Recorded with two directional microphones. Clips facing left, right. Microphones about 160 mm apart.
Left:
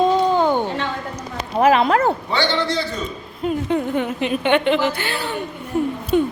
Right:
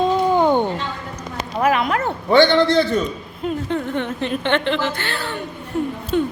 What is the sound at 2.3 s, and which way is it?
Speech, 55° right (ahead or behind).